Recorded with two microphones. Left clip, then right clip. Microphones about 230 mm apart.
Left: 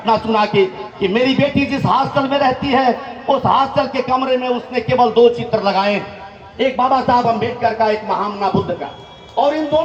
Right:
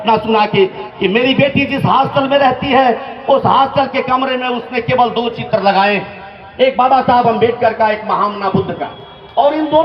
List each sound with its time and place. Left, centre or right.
0.0 s a man's voice: right